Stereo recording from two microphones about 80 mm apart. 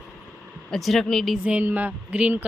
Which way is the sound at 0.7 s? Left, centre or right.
Centre.